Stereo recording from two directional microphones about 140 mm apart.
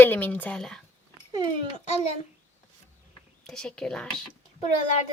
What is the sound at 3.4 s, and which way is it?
Speech, 5° left (ahead or behind).